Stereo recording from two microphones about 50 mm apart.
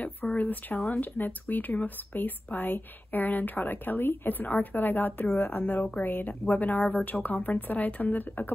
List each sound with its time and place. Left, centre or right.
0.0 s speech: left